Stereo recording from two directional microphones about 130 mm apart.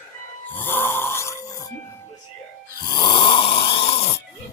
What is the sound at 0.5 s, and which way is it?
Snoring, 15° left (ahead or behind).